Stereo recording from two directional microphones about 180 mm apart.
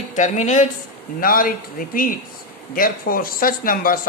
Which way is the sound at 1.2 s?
55° left (ahead or behind).